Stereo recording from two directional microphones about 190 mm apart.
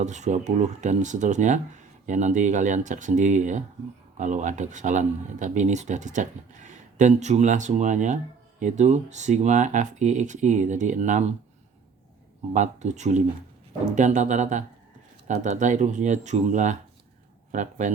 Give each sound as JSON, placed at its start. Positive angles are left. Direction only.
{"t": 0.0, "sound": "speech", "side_deg": -40}
{"t": 12.5, "sound": "speech", "side_deg": -40}